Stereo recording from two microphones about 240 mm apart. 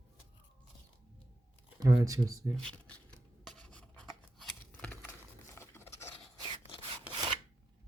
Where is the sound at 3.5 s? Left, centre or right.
Centre.